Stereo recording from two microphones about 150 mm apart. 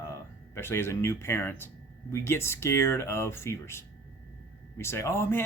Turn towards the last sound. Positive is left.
turn(degrees=15)  # may be behind; listen again after turning